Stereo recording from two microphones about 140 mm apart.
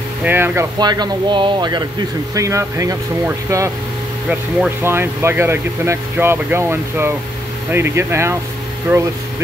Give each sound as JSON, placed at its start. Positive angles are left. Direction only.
{"t": 0.2, "sound": "speech", "side_deg": -15}
{"t": 0.7, "sound": "speech", "side_deg": -30}